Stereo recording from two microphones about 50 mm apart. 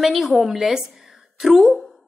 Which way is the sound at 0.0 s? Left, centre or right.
Centre.